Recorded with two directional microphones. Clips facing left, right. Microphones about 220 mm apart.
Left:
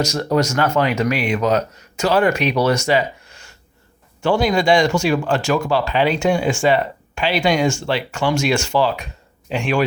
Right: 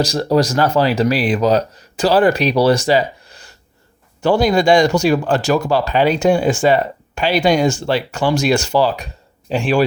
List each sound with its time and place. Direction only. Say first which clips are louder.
0.0 s speech: right 3 dB; 35° right (ahead or behind)